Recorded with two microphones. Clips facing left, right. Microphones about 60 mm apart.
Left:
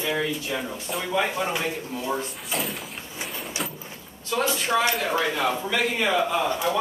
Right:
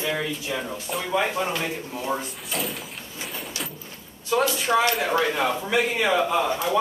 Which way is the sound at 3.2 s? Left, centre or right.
Centre.